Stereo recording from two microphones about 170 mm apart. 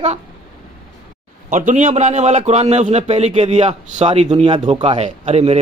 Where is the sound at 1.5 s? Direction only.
50° right (ahead or behind).